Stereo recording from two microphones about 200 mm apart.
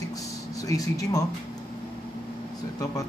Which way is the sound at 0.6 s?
15° left (ahead or behind).